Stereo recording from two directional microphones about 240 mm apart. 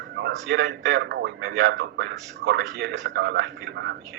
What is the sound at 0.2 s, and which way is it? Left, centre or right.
A man's voice, right.